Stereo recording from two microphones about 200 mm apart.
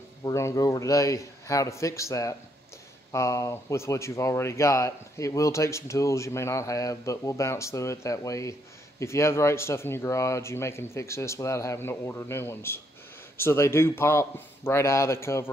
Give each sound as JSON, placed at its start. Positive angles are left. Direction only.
{"t": 0.2, "sound": "speech", "side_deg": 15}